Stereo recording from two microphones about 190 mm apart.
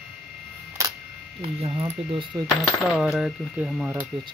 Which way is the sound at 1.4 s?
30° right (ahead or behind).